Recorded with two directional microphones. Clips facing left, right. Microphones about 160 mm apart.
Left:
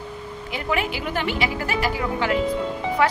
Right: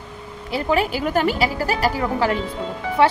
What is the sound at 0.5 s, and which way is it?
A woman's voice, 35° right (ahead or behind).